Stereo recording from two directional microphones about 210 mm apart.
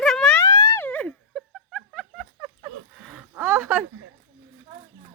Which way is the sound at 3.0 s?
Centre (ahead or behind).